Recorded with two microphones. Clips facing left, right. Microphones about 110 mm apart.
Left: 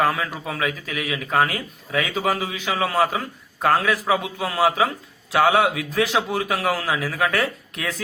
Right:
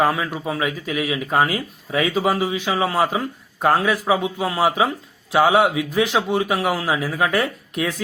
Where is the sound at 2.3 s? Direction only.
15° right (ahead or behind).